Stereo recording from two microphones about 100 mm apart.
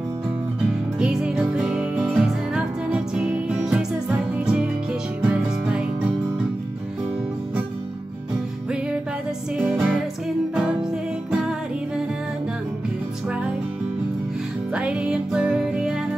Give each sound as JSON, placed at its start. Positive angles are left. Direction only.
{"t": 0.9, "sound": "music", "side_deg": -10}
{"t": 9.6, "sound": "music", "side_deg": -15}
{"t": 14.7, "sound": "music", "side_deg": -10}